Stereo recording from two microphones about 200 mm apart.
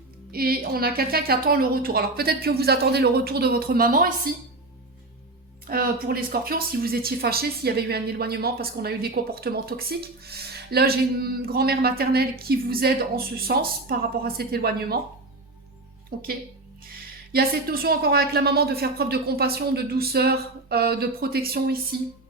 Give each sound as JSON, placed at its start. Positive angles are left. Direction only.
{"t": 0.3, "sound": "speech", "side_deg": -50}
{"t": 5.6, "sound": "speech", "side_deg": -45}
{"t": 16.1, "sound": "speech", "side_deg": -50}